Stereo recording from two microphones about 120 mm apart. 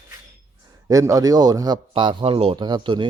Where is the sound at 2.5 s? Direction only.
40° right (ahead or behind).